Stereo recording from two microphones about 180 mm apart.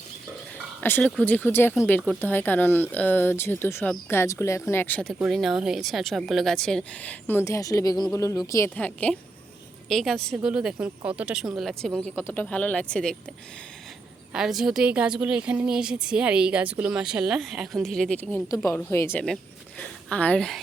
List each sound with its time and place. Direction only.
0.8 s a woman's voice: 10° left (ahead or behind)
14.3 s a woman's voice: 5° right (ahead or behind)